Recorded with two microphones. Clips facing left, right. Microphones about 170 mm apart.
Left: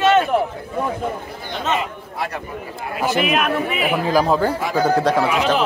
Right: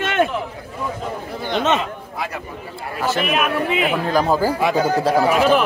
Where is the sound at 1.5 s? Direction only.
75° right (ahead or behind).